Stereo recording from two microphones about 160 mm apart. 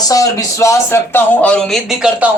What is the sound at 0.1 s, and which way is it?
A man's voice, 20° left (ahead or behind).